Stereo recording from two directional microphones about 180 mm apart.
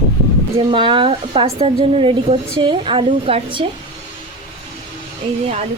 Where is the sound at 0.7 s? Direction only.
30° right (ahead or behind).